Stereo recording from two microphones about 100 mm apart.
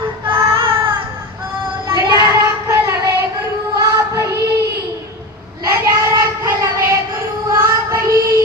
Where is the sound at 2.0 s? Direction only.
45° right (ahead or behind).